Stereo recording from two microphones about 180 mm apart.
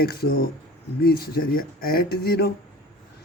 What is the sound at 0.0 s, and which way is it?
A man's voice, 55° left (ahead or behind).